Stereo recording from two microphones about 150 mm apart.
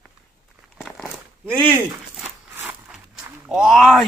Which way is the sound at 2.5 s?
10° right (ahead or behind).